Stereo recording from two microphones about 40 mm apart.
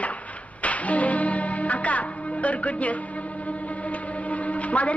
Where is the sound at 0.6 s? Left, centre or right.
Left.